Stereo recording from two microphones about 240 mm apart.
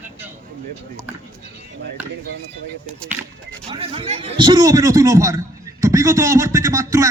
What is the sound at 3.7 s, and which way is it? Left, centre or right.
Speech, right.